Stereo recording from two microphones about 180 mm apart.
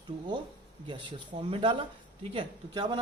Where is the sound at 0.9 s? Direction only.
30° right (ahead or behind).